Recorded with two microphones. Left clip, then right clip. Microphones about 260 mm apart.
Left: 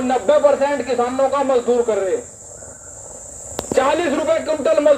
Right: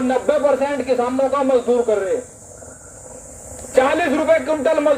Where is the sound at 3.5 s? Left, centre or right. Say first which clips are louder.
Right 1 dB; left.